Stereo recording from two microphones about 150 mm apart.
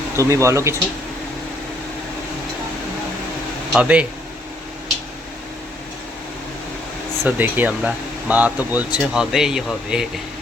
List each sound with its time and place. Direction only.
0.2 s speech: 20° right (ahead or behind)
3.7 s speech: 10° right (ahead or behind)
7.3 s speech: 10° right (ahead or behind)